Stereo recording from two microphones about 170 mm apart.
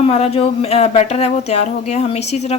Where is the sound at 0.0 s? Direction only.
35° left (ahead or behind).